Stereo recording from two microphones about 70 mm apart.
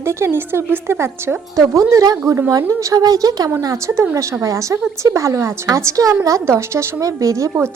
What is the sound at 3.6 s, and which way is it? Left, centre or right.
Speech, right.